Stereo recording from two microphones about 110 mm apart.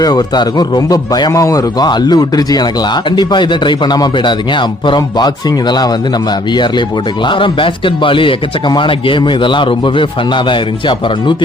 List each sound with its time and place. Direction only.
0.0 s a man's voice: 40° left (ahead or behind)